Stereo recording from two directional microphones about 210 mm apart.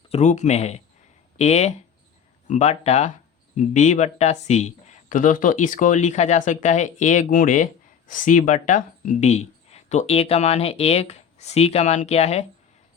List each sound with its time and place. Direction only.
0.1 s speech: 35° left (ahead or behind)